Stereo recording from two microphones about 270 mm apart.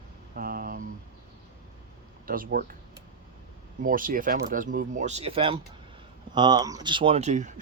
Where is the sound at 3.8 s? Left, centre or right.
Right.